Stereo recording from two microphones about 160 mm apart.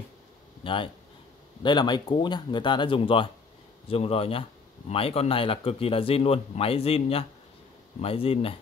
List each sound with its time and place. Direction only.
0.6 s speech: 30° left (ahead or behind)